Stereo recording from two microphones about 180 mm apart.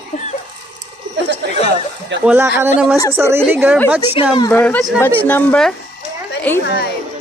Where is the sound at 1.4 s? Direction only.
70° right (ahead or behind).